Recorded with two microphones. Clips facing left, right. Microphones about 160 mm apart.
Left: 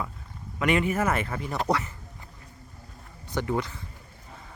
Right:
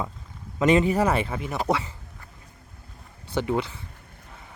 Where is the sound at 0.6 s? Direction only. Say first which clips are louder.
Right 5 dB; 25° right (ahead or behind).